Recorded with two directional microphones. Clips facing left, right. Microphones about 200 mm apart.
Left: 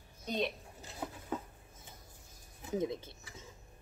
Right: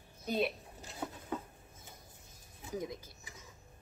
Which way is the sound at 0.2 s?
5° right (ahead or behind).